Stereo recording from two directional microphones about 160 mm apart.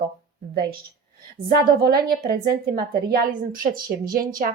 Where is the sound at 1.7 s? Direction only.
75° right (ahead or behind).